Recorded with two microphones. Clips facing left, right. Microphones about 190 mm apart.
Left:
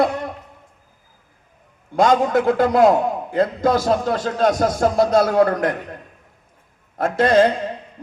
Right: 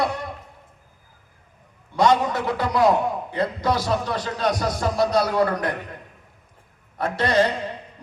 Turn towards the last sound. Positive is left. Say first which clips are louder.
# left 6 dB
turn(degrees=50)  # may be behind; listen again after turning